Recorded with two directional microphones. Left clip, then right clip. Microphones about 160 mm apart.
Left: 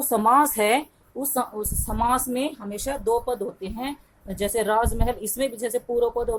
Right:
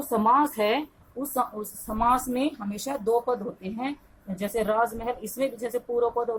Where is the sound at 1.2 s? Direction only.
45° left (ahead or behind).